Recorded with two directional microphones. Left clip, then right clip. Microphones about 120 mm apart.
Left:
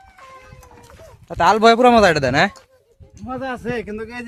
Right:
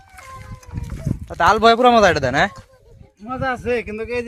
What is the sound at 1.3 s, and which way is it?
Speech, 30° left (ahead or behind).